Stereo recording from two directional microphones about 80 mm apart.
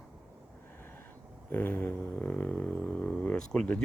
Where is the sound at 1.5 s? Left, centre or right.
Left.